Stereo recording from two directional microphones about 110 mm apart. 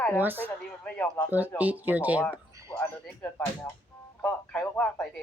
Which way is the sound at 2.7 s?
20° left (ahead or behind).